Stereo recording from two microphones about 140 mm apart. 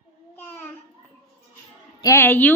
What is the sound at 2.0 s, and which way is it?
Speech, 20° left (ahead or behind).